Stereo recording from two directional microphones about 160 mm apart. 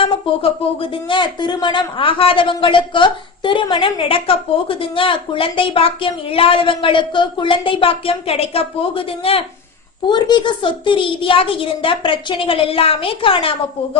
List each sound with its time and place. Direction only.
0.0 s speech: 35° left (ahead or behind)